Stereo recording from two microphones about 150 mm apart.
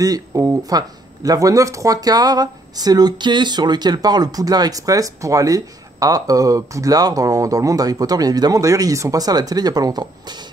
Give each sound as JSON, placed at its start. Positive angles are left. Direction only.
{"t": 0.0, "sound": "speech", "side_deg": -25}